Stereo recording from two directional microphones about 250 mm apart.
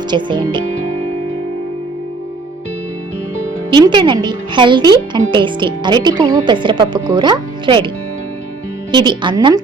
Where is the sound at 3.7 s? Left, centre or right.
Centre.